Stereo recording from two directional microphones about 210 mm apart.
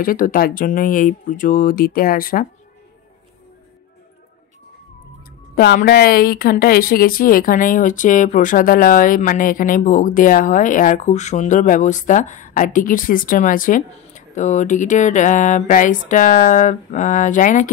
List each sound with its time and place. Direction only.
0.0 s speech: 40° left (ahead or behind)
5.6 s speech: 50° left (ahead or behind)